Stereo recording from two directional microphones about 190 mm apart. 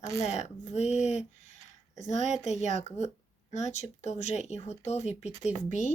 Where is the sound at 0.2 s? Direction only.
35° left (ahead or behind).